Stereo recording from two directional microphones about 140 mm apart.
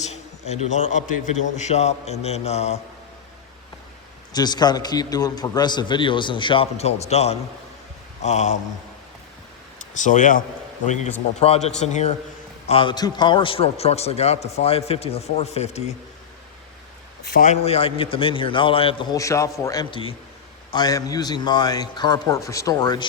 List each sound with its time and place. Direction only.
0.0 s a man's voice: 55° left (ahead or behind)
4.3 s a man's voice: 30° left (ahead or behind); by 8.5 s 55° left (ahead or behind)
10.0 s speech: 65° left (ahead or behind)
11.3 s a man's voice: 45° left (ahead or behind)
12.6 s a man's voice: 40° left (ahead or behind)
17.2 s a man's voice: 90° left
17.5 s a man's voice: 45° left (ahead or behind)
19.1 s a man's voice: 20° left (ahead or behind)